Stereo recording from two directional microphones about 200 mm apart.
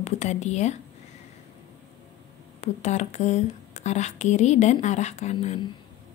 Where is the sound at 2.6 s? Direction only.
35° left (ahead or behind).